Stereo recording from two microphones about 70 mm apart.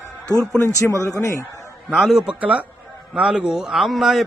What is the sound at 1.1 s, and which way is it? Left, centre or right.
Speech, left.